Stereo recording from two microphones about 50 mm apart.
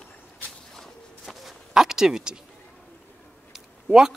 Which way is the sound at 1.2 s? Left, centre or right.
Centre.